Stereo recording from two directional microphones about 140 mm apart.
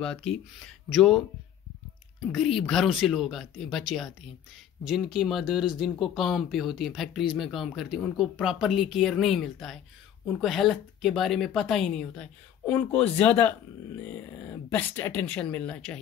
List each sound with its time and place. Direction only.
0.0 s speech: 5° left (ahead or behind)
2.3 s speech: centre (ahead or behind)
4.8 s speech: centre (ahead or behind)